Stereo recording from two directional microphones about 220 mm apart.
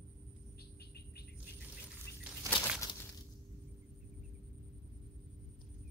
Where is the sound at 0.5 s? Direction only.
45° left (ahead or behind).